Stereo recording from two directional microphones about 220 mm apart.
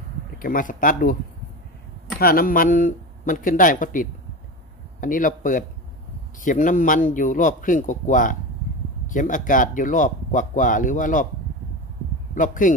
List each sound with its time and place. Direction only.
0.4 s speech: 40° left (ahead or behind)
2.1 s speech: 40° left (ahead or behind)
12.4 s speech: 35° left (ahead or behind)